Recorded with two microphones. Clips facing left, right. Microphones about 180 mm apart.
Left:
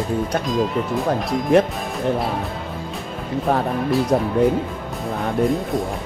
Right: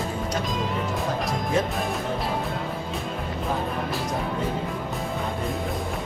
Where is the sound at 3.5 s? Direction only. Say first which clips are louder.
Left 9 dB; 65° left (ahead or behind).